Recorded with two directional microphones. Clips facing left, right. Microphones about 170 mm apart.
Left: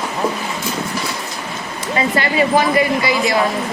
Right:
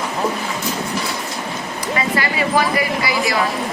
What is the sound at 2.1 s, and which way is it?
A woman's voice, 25° left (ahead or behind).